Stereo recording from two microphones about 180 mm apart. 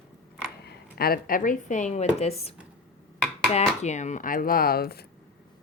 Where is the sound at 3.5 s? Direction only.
40° left (ahead or behind).